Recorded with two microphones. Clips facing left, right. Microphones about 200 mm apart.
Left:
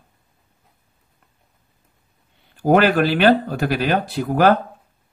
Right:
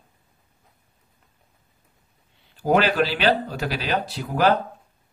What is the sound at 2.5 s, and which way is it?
Speech, 55° left (ahead or behind).